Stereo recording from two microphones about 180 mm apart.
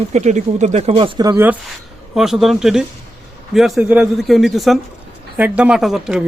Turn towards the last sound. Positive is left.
turn(degrees=0)  # may be behind; listen again after turning